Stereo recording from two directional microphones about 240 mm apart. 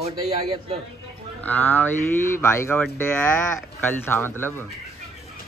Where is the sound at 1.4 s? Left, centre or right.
Centre.